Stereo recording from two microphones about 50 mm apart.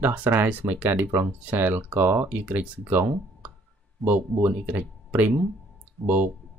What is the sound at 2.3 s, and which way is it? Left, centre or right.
Speech, right.